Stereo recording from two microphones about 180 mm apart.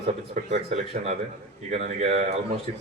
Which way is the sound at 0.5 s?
40° right (ahead or behind).